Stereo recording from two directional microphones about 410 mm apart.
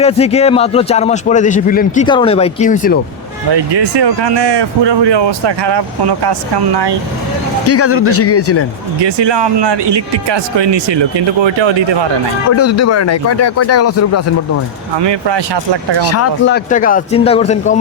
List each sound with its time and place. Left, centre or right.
0.0 s a man's voice: centre
3.5 s speech: right
7.7 s speech: left
9.0 s speech: right
12.5 s speech: left
14.9 s speech: right
16.0 s speech: left
16.6 s a man's voice: centre